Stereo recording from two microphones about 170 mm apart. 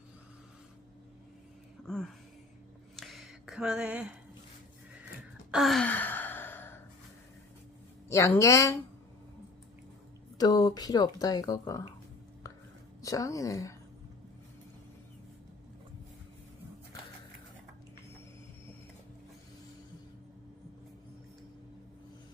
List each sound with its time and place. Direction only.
3.0 s a sound: centre (ahead or behind)
5.5 s sigh: centre (ahead or behind)
8.1 s speech: 15° left (ahead or behind)
10.3 s speech: 20° left (ahead or behind)
12.4 s whispering: 20° left (ahead or behind)
13.0 s speech: 20° left (ahead or behind)